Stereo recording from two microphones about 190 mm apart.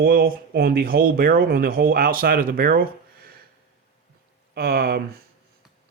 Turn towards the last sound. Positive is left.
turn(degrees=-55)  # may be behind; listen again after turning